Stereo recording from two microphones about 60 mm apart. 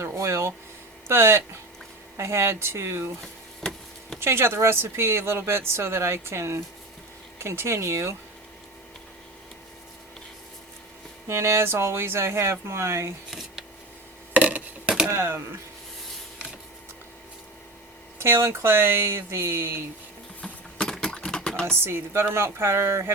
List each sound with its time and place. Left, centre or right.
0.0 s a sound: right
1.0 s speech: right
4.2 s speech: right
11.3 s speech: right
14.3 s wood: right
15.1 s speech: right
18.2 s speech: right
20.4 s typing: centre
21.8 s speech: right